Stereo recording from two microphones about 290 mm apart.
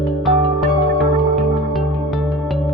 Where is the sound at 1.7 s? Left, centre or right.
Centre.